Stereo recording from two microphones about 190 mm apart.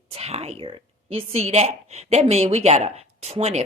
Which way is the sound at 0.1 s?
35° right (ahead or behind).